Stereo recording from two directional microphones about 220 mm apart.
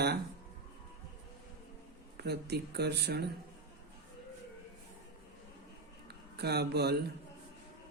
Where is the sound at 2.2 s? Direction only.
50° right (ahead or behind).